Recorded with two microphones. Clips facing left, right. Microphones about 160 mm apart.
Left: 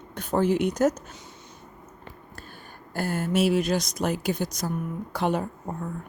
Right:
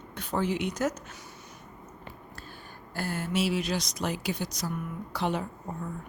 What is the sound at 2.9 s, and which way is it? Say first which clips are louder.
Speech: left 5 dB; 45° left (ahead or behind).